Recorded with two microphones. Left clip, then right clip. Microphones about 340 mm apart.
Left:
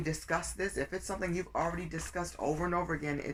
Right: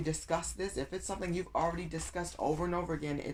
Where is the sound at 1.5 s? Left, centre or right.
Right.